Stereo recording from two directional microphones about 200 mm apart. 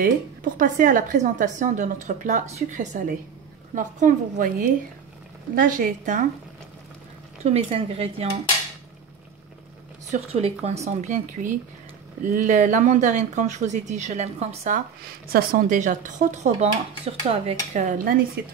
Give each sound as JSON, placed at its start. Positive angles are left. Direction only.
{"t": 0.0, "sound": "a woman's voice", "side_deg": -40}
{"t": 7.4, "sound": "a woman's voice", "side_deg": -30}
{"t": 10.1, "sound": "a woman's voice", "side_deg": -30}